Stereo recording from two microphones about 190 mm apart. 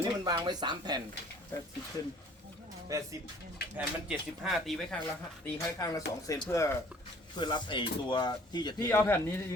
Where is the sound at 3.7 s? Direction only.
5° right (ahead or behind).